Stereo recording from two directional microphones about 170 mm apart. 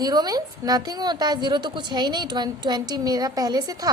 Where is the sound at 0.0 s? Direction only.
25° right (ahead or behind).